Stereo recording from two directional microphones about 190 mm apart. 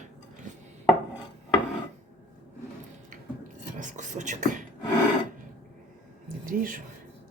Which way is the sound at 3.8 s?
40° right (ahead or behind).